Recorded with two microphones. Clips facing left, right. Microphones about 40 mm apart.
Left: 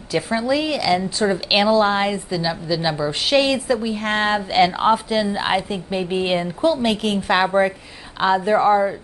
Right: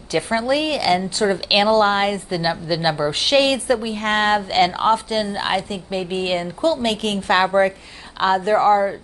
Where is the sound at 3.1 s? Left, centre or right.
Centre.